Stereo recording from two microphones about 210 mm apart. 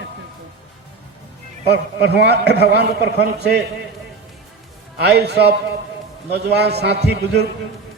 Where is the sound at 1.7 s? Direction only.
50° right (ahead or behind).